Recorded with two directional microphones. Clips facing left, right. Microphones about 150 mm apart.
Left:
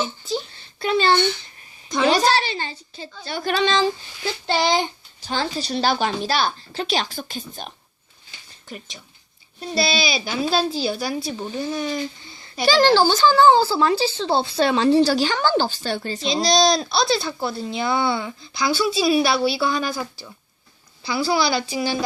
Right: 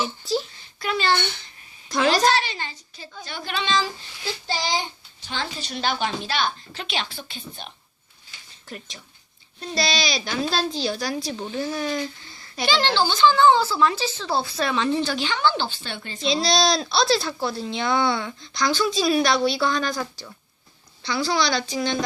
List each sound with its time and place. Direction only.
0.3 s speech: centre (ahead or behind)
0.8 s speech: 30° left (ahead or behind)
1.9 s a woman's voice: centre (ahead or behind)
2.2 s speech: 30° left (ahead or behind)
4.4 s a child's voice: 65° left (ahead or behind)
5.3 s speech: 35° left (ahead or behind)
8.7 s speech: centre (ahead or behind)
12.6 s speech: 40° left (ahead or behind)
16.2 s a woman's voice: centre (ahead or behind)